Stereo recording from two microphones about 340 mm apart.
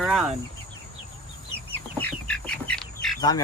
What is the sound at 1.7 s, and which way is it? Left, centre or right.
Bird, centre.